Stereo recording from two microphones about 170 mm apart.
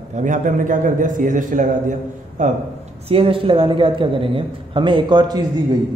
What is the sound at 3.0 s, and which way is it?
A man's voice, 35° right (ahead or behind).